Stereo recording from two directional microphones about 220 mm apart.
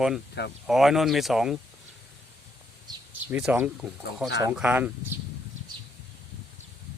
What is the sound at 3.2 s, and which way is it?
Speech, 5° right (ahead or behind).